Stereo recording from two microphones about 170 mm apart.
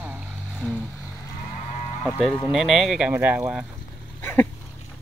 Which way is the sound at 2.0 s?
5° left (ahead or behind).